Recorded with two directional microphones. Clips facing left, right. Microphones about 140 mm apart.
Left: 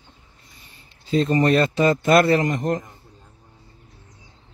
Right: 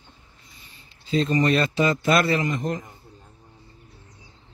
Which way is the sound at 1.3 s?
45° left (ahead or behind).